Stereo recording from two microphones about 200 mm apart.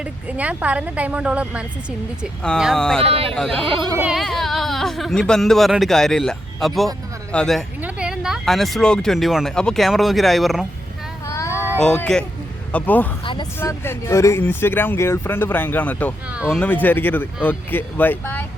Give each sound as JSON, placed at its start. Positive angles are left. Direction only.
{"t": 0.0, "sound": "speech", "side_deg": -5}
{"t": 3.0, "sound": "speech", "side_deg": -30}
{"t": 3.9, "sound": "speech", "side_deg": -5}
{"t": 11.3, "sound": "a sound", "side_deg": 15}
{"t": 11.8, "sound": "speech", "side_deg": 5}
{"t": 13.2, "sound": "speech", "side_deg": 25}
{"t": 13.6, "sound": "speech", "side_deg": 10}
{"t": 16.3, "sound": "speech", "side_deg": -5}
{"t": 16.6, "sound": "speech", "side_deg": 10}